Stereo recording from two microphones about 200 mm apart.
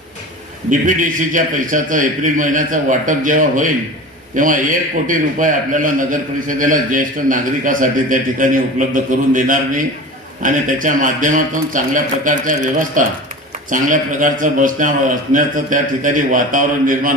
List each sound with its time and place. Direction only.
0.7 s a man's voice: 40° right (ahead or behind)